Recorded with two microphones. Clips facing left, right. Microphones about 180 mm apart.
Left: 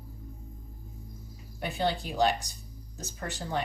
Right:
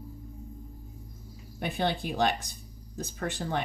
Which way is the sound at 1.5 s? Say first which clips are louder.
Even; 60° right (ahead or behind).